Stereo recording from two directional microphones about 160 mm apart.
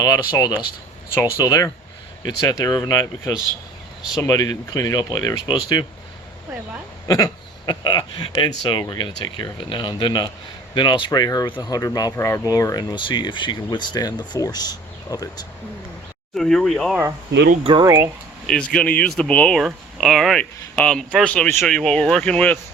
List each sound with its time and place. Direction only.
0.0 s speech: 20° left (ahead or behind)
7.1 s speech: 25° left (ahead or behind)
16.3 s speech: centre (ahead or behind)
17.6 s speech: 30° right (ahead or behind)
17.8 s speech: 20° right (ahead or behind)
18.4 s speech: 5° left (ahead or behind)